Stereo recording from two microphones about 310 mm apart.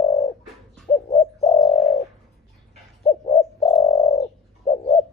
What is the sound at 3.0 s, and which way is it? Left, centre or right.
Bird, left.